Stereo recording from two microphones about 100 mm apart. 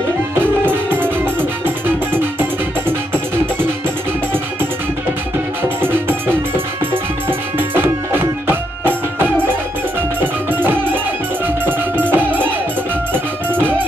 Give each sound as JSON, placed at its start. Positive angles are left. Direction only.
{"t": 0.4, "sound": "music", "side_deg": -20}
{"t": 5.6, "sound": "music", "side_deg": -20}
{"t": 7.5, "sound": "music", "side_deg": -20}